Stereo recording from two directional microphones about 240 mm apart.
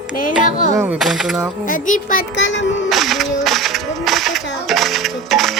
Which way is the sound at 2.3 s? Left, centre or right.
Left.